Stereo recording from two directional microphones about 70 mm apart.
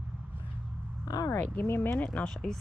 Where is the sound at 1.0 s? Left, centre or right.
Left.